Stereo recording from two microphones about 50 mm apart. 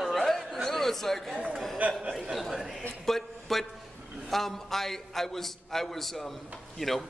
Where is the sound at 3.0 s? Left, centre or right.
Centre.